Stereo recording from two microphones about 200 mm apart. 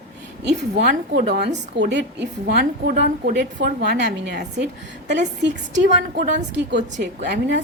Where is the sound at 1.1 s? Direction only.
50° right (ahead or behind).